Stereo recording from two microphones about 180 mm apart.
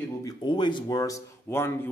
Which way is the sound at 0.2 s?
20° left (ahead or behind).